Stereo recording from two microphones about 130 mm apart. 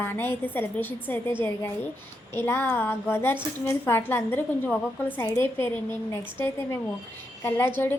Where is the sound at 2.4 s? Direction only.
15° left (ahead or behind).